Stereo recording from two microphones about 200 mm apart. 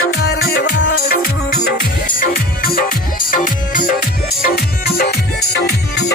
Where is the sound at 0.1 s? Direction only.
50° left (ahead or behind).